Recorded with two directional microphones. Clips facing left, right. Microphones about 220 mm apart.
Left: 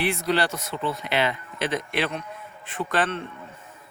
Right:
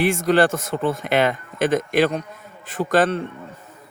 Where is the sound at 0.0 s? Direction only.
45° right (ahead or behind).